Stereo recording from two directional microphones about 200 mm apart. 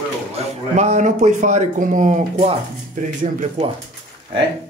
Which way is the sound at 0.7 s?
35° right (ahead or behind).